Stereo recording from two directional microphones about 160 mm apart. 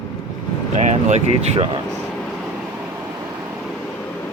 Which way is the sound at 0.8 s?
45° right (ahead or behind).